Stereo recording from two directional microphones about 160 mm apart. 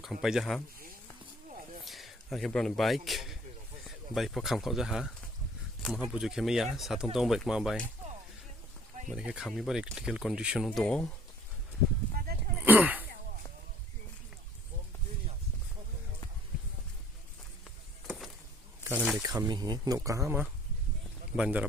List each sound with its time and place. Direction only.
0.0 s speech: 5° right (ahead or behind)
1.8 s speech: centre (ahead or behind)
9.0 s speech: 5° right (ahead or behind)
10.7 s speech: 5° left (ahead or behind)
12.2 s a sound: 70° right (ahead or behind)
12.6 s a sound: 10° right (ahead or behind)
18.9 s speech: 5° right (ahead or behind)
19.2 s speech: 20° right (ahead or behind)